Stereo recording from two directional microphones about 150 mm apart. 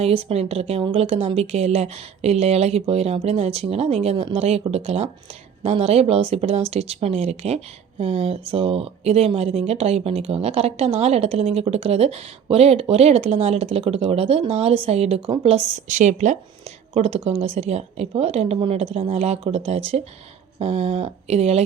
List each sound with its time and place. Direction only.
0.0 s speech: 40° right (ahead or behind)